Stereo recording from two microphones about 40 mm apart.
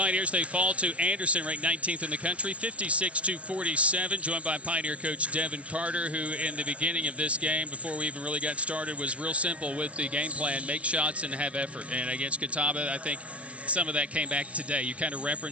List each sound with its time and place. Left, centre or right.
0.0 s speech: right